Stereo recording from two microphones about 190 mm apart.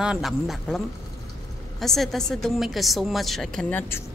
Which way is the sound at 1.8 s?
Centre (ahead or behind).